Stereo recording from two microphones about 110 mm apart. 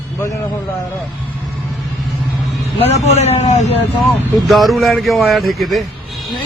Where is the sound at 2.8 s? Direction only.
80° left.